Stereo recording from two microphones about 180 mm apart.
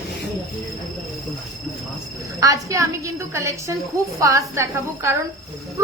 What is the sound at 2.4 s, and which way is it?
A woman's voice, 20° right (ahead or behind).